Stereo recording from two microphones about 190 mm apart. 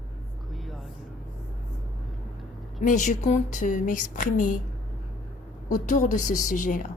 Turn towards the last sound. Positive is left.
turn(degrees=45)  # may be behind; listen again after turning